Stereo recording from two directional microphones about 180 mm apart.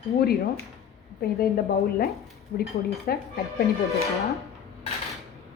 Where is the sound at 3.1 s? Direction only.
60° left (ahead or behind).